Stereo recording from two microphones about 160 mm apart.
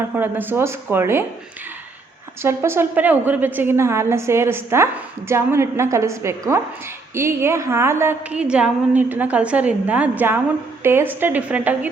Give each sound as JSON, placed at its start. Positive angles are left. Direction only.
{"t": 0.2, "sound": "a woman's voice", "side_deg": -10}
{"t": 2.4, "sound": "a woman's voice", "side_deg": -15}